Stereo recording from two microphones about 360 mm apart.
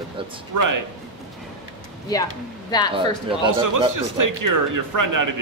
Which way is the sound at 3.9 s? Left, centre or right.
Right.